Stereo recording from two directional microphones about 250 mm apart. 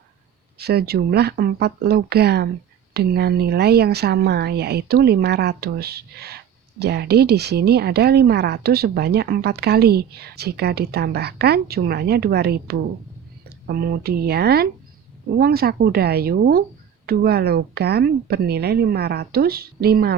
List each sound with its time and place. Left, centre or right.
0.6 s a woman's voice: right
13.7 s a woman's voice: right